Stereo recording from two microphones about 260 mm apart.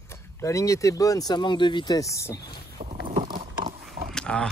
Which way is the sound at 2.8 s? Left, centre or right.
Right.